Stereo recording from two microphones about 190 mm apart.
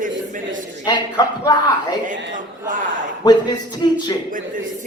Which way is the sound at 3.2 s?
20° left (ahead or behind).